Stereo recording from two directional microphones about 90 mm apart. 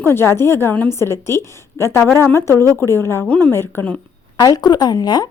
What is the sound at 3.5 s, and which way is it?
Speech, 25° left (ahead or behind).